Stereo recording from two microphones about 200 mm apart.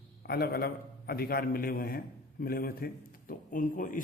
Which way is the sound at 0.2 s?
50° left (ahead or behind).